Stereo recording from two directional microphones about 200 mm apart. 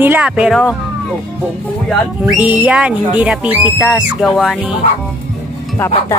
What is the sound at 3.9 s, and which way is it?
Music, centre (ahead or behind).